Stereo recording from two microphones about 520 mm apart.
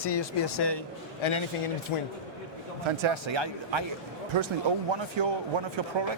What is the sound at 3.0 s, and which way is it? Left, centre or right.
Speech, right.